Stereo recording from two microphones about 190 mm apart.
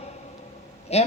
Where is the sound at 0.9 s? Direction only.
35° left (ahead or behind).